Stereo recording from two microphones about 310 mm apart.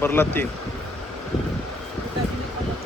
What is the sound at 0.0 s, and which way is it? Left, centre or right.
Speech, centre.